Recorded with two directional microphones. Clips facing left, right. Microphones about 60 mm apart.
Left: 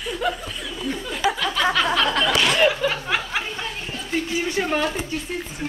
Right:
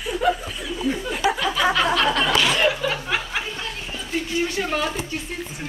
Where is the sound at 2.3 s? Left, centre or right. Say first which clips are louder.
Left 1 dB; centre.